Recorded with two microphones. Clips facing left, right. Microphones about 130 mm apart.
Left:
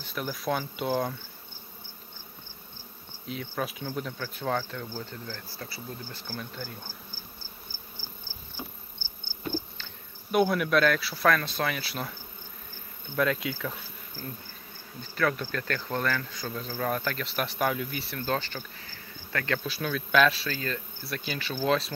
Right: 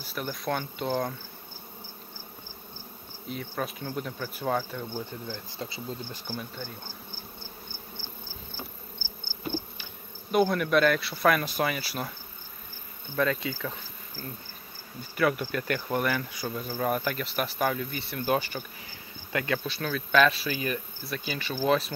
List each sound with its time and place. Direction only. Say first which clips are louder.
0.0 s insect: even; centre (ahead or behind)
3.3 s insect: even; centre (ahead or behind)
4.8 s speech: right 2 dB; 20° right (ahead or behind)
6.5 s insect: even; centre (ahead or behind)
10.3 s insect: even; centre (ahead or behind)
11.2 s speech: right 1 dB; 15° right (ahead or behind)
11.7 s insect: right 1 dB; 5° right (ahead or behind)
13.2 s insect: even; 5° left (ahead or behind)
14.2 s speech: even; 5° right (ahead or behind)
18.2 s insect: right 4 dB; 15° right (ahead or behind)
19.6 s insect: even; centre (ahead or behind)
20.5 s speech: right 3 dB; 15° right (ahead or behind)
21.0 s insect: right 1 dB; centre (ahead or behind)